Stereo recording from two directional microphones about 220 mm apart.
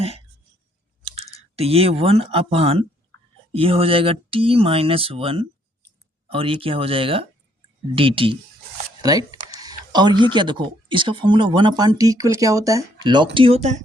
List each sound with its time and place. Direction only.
1.0 s speech: 25° right (ahead or behind)
3.1 s whispering: 10° left (ahead or behind)
3.5 s speech: 25° right (ahead or behind)